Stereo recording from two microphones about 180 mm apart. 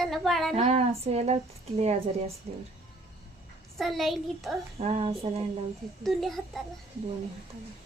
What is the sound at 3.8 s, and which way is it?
Speech, centre (ahead or behind).